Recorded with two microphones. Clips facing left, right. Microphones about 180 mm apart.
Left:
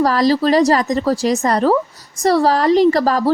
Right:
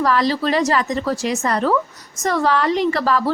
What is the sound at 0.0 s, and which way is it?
Speech, 40° left (ahead or behind).